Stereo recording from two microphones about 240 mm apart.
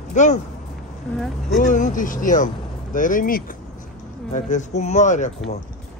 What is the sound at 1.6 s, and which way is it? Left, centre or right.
Speech, left.